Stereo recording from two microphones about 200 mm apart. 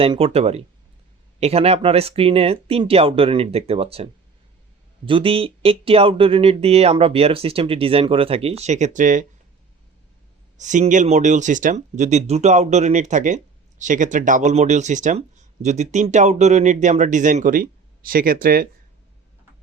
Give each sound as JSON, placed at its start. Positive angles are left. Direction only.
{"t": 0.0, "sound": "speech", "side_deg": -30}
{"t": 10.6, "sound": "speech", "side_deg": -40}